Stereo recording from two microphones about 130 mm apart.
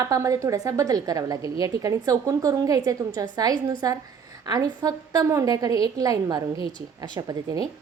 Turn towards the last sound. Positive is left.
turn(degrees=-30)  # may be behind; listen again after turning